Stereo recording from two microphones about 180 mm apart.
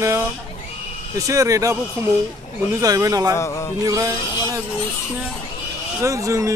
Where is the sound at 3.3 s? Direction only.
15° left (ahead or behind).